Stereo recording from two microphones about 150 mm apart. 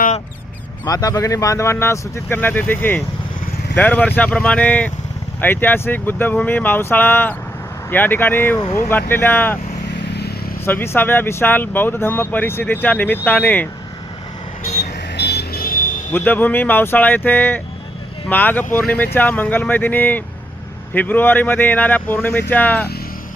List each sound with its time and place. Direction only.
0.9 s speech: 25° left (ahead or behind)
10.1 s vehicle: 90° left
10.7 s speech: 15° left (ahead or behind)
15.2 s vehicle: 90° left; by 15.9 s 70° left (ahead or behind)
16.1 s speech: 10° left (ahead or behind)